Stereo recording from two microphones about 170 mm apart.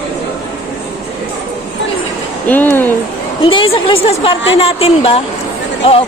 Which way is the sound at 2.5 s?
10° left (ahead or behind).